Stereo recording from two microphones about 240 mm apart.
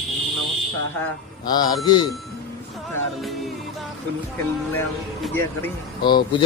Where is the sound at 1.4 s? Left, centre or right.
Centre.